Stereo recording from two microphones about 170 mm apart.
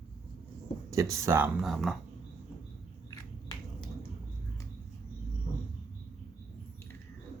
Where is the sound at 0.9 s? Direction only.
20° right (ahead or behind).